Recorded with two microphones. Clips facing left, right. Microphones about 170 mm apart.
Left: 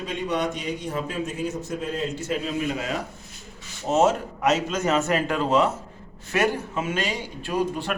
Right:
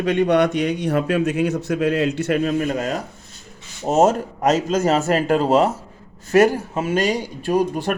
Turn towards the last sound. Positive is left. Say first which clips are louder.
# right 6 dB
turn(degrees=-45)  # may be behind; listen again after turning